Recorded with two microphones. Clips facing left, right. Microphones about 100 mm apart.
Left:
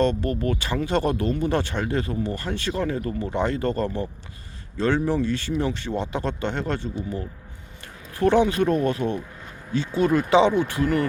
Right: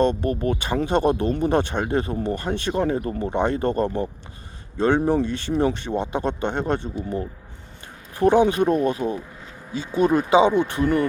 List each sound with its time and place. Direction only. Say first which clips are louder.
0.0 s speech: right 2 dB; 20° right (ahead or behind)
5.2 s speech: right 3 dB; 20° right (ahead or behind)